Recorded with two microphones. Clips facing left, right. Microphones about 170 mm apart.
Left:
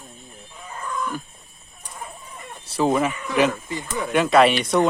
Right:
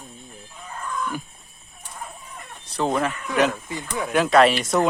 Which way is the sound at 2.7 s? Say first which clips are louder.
Left 3 dB; 5° left (ahead or behind).